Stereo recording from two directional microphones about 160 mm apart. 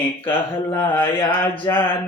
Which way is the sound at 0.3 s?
15° left (ahead or behind).